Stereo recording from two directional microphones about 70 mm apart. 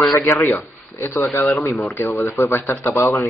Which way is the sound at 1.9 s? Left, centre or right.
Left.